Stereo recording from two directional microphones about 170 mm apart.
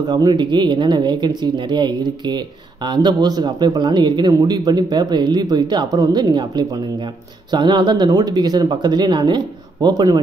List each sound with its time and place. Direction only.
0.0 s speech: 25° right (ahead or behind)